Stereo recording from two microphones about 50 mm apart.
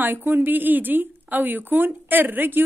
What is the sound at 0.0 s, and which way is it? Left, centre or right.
Speech, right.